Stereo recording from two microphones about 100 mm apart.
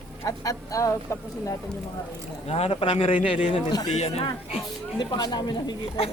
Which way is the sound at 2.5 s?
90° left.